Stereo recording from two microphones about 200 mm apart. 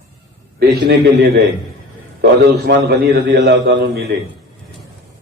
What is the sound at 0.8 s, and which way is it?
A man's voice, 50° right (ahead or behind).